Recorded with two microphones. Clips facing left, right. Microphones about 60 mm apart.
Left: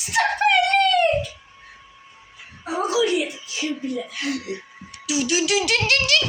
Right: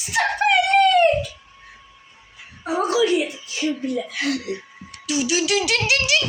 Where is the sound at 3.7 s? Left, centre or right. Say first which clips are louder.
Right 3 dB; right.